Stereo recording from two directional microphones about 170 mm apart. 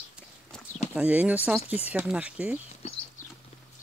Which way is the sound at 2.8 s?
35° left (ahead or behind).